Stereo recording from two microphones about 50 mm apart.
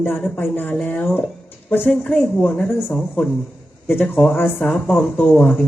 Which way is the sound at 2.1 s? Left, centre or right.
Centre.